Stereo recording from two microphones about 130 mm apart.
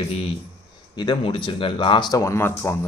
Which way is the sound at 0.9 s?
40° left (ahead or behind).